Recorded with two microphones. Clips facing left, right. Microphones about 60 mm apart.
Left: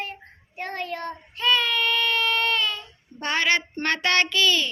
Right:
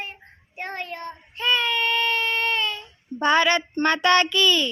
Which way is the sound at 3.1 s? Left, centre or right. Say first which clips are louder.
Right 10 dB; right.